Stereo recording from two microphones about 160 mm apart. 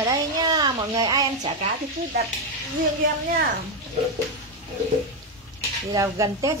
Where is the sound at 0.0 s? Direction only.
25° right (ahead or behind).